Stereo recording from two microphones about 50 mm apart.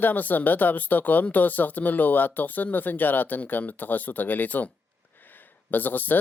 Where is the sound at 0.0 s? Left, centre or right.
Left.